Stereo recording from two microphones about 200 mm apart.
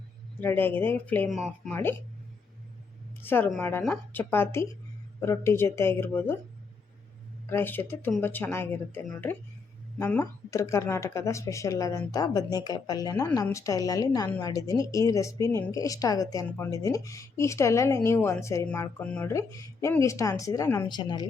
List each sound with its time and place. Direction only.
0.3 s speech: 10° left (ahead or behind)
1.7 s speech: 10° left (ahead or behind)
3.2 s speech: 10° left (ahead or behind)
7.5 s speech: 10° left (ahead or behind)